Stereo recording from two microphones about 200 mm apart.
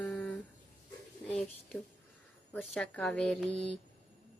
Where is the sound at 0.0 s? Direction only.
10° left (ahead or behind).